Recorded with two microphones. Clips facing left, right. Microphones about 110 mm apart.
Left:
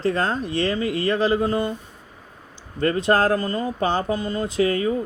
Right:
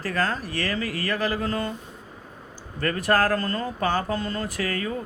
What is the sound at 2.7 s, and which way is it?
Speech, 20° left (ahead or behind).